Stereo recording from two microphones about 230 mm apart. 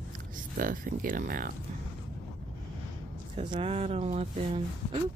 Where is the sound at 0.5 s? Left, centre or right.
Right.